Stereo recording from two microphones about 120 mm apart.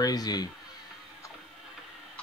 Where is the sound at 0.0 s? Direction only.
30° left (ahead or behind).